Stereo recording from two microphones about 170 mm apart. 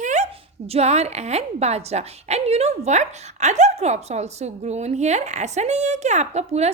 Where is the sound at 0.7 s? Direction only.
40° right (ahead or behind).